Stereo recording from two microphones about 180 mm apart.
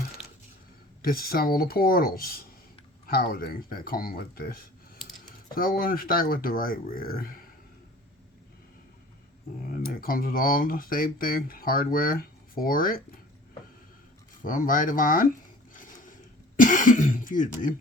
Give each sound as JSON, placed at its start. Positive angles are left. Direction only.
{"t": 1.0, "sound": "speech", "side_deg": 55}
{"t": 9.6, "sound": "speech", "side_deg": 55}
{"t": 14.4, "sound": "speech", "side_deg": 50}
{"t": 15.7, "sound": "mechanisms", "side_deg": 50}
{"t": 16.6, "sound": "speech", "side_deg": 45}